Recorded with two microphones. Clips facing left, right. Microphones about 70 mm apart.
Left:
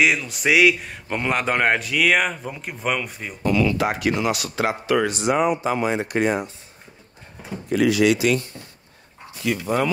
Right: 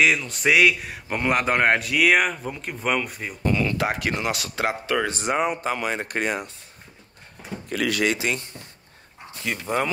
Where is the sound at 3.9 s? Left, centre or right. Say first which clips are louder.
Left 4 dB; right.